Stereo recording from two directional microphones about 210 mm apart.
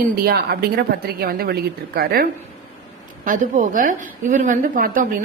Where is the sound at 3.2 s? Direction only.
40° right (ahead or behind).